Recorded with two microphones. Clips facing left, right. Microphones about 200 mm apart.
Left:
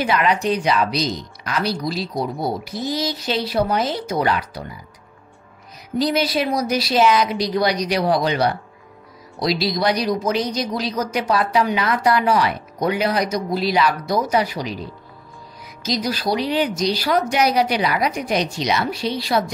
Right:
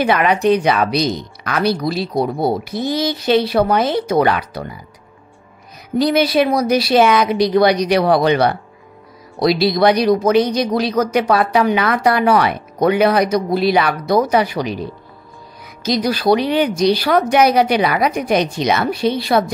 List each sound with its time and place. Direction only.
0.0 s speech: 60° right (ahead or behind)
5.9 s speech: 60° right (ahead or behind)